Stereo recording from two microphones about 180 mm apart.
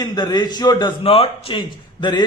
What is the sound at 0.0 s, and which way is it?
Speech, 25° left (ahead or behind).